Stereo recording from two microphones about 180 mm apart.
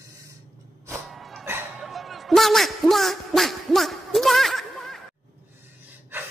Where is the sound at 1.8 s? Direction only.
Centre (ahead or behind).